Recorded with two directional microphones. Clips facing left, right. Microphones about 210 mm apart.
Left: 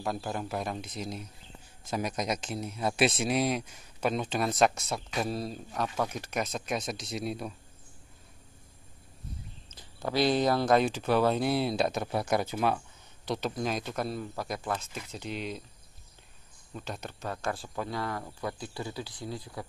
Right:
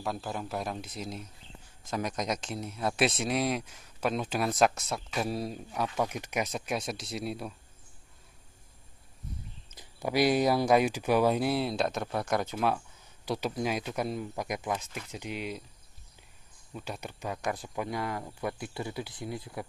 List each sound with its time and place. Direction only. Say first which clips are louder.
0.0 s speech: left 1 dB; centre (ahead or behind)
9.8 s speech: right 1 dB; 15° right (ahead or behind); by 12.8 s centre (ahead or behind)
13.2 s speech: even; 10° right (ahead or behind)
16.7 s speech: even; 10° right (ahead or behind)